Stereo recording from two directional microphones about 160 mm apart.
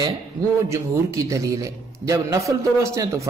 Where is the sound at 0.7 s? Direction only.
20° right (ahead or behind).